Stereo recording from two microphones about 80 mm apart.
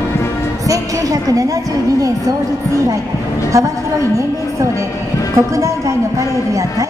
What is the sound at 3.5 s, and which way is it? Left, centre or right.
Speech, right.